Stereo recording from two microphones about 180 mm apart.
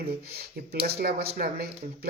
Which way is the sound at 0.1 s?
60° right (ahead or behind).